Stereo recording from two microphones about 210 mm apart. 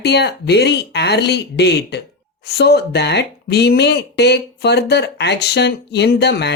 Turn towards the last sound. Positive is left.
turn(degrees=55)  # may be behind; listen again after turning